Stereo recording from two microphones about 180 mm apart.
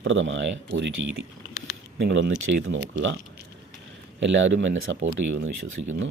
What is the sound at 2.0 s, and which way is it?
Speech, 85° right.